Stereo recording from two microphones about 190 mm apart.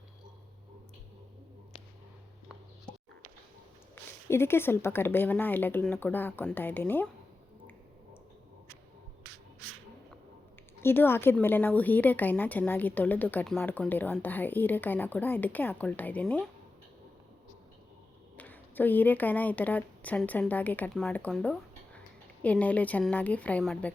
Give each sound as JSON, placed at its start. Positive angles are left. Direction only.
{"t": 3.9, "sound": "a woman's voice", "side_deg": 15}
{"t": 10.8, "sound": "a woman's voice", "side_deg": 10}
{"t": 18.3, "sound": "a woman's voice", "side_deg": 10}